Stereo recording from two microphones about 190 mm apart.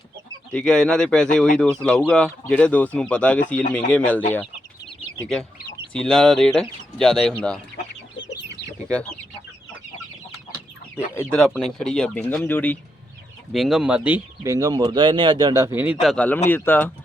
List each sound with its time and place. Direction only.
0.5 s speech: 5° left (ahead or behind)
5.2 s speech: 5° left (ahead or behind)
8.1 s chicken: 70° left (ahead or behind)
8.9 s speech: 5° left (ahead or behind)
10.9 s speech: 15° left (ahead or behind)
13.5 s speech: centre (ahead or behind)